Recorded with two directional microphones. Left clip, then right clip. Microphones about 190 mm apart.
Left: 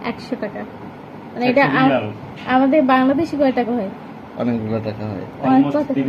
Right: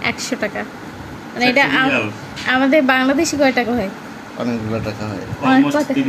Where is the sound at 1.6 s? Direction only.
30° right (ahead or behind).